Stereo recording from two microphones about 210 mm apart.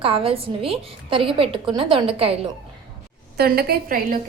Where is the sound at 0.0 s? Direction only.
25° right (ahead or behind).